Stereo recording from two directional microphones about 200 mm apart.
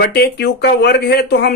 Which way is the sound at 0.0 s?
55° left (ahead or behind).